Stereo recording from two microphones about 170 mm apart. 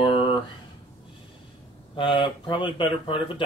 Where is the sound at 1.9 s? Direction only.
30° left (ahead or behind).